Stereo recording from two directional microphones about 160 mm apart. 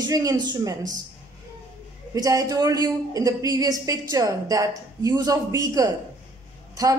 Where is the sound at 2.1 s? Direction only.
20° right (ahead or behind).